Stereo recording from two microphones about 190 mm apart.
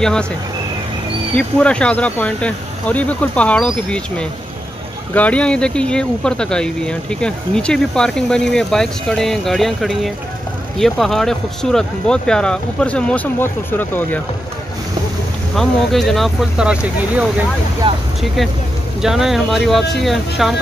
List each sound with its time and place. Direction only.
0.0 s speech: 5° left (ahead or behind)
1.3 s speech: 5° left (ahead or behind)
15.5 s speech: centre (ahead or behind)
17.8 s speech: 25° right (ahead or behind)
18.9 s speech: centre (ahead or behind)